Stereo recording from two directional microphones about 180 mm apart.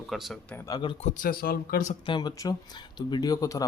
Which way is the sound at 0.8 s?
30° left (ahead or behind).